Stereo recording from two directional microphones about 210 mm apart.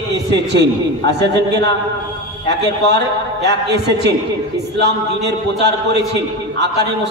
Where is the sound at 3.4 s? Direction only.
55° right (ahead or behind).